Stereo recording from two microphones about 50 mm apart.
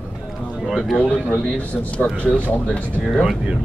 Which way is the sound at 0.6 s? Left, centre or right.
Centre.